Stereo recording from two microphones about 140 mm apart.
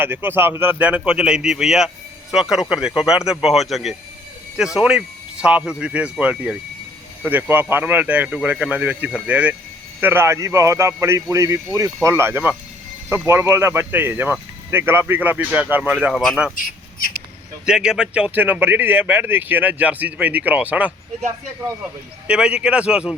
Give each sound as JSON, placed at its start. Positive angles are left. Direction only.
{"t": 0.0, "sound": "a man's voice", "side_deg": -15}
{"t": 17.7, "sound": "speech", "side_deg": -5}
{"t": 22.3, "sound": "speech", "side_deg": -5}